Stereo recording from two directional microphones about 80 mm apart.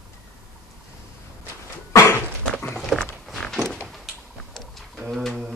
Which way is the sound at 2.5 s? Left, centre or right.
Centre.